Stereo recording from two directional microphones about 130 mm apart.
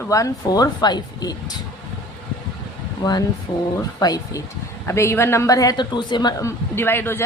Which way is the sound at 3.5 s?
40° left (ahead or behind).